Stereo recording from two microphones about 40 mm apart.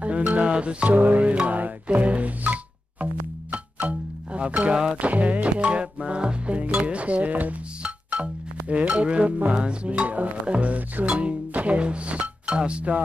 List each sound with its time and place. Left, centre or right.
0.0 s music: right
0.8 s speech: right
1.5 s music: right
4.9 s speech: right
7.8 s music: right
9.9 s speech: right